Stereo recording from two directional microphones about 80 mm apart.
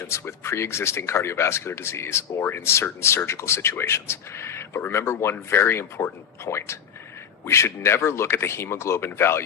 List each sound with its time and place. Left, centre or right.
0.0 s speech: left